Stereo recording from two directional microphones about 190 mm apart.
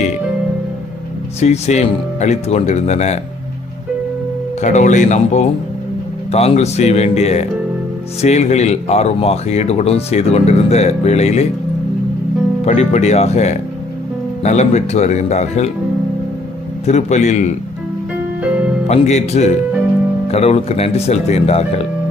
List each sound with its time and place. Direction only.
1.4 s speech: 35° left (ahead or behind)
4.6 s speech: 40° left (ahead or behind)
12.6 s speech: 35° left (ahead or behind)
16.8 s speech: 40° left (ahead or behind)
18.9 s speech: 35° left (ahead or behind)